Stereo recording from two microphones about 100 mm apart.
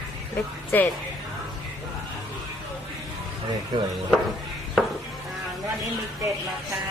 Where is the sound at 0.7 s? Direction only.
15° left (ahead or behind).